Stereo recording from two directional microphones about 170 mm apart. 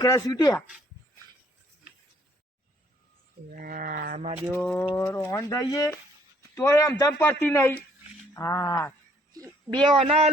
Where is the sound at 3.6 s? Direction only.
55° right (ahead or behind).